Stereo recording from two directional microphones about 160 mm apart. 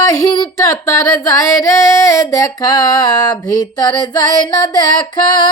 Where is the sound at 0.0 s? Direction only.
20° left (ahead or behind).